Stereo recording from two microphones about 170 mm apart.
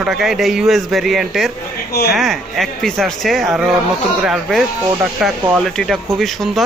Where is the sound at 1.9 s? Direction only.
70° left (ahead or behind).